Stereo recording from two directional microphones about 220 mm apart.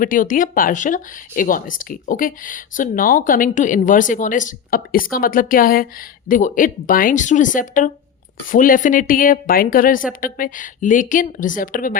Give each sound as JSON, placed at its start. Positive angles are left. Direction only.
{"t": 0.0, "sound": "speech", "side_deg": 35}